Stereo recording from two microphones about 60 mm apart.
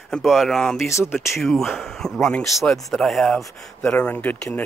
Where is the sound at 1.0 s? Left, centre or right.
Centre.